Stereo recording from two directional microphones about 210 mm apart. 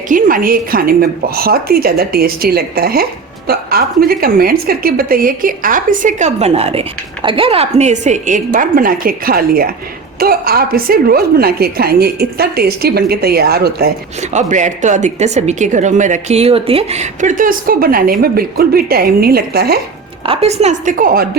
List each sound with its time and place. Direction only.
0.1 s a woman's voice: 40° right (ahead or behind)
14.2 s a woman's voice: 35° right (ahead or behind)
20.2 s a woman's voice: 30° right (ahead or behind); by 21.2 s 45° right (ahead or behind)